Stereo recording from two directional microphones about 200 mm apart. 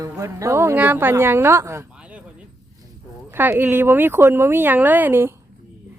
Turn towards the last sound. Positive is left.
turn(degrees=-10)  # may be behind; listen again after turning